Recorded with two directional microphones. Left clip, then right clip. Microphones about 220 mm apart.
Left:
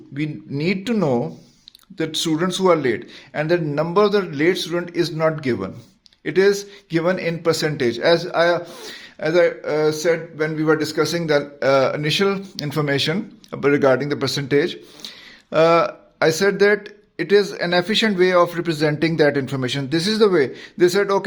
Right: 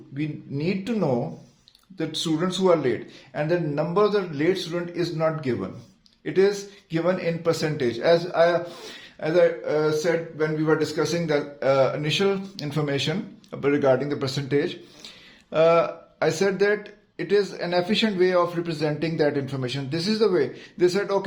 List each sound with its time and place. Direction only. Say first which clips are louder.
0.2 s a man's voice: left 5 dB; 45° left (ahead or behind)